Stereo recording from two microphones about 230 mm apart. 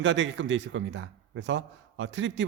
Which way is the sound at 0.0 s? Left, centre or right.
Right.